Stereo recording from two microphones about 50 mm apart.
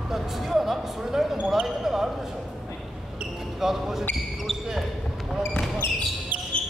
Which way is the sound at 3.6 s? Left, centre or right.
Centre.